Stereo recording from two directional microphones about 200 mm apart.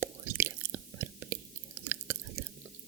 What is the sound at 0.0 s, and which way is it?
Chewing, 10° right (ahead or behind).